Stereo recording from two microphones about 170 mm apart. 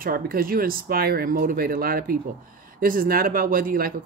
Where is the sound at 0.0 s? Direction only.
60° right (ahead or behind).